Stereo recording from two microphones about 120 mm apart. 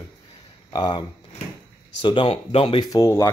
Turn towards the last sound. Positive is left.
turn(degrees=25)  # may be behind; listen again after turning